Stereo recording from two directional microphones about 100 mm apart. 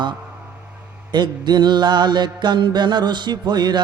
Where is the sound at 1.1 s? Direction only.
45° right (ahead or behind).